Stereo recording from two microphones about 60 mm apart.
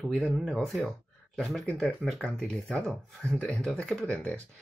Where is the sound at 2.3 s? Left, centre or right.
Centre.